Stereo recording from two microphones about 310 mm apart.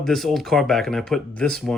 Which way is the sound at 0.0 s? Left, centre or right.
Centre.